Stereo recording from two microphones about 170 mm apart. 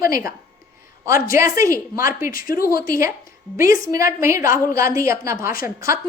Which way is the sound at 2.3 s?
55° left (ahead or behind).